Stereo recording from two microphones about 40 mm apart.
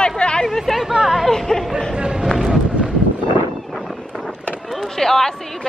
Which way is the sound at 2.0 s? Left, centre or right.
Right.